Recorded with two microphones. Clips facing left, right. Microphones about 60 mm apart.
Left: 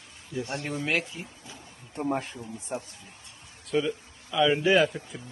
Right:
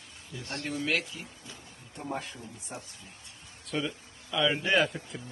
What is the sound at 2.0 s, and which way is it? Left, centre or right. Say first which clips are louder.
Speech: left 7 dB; left.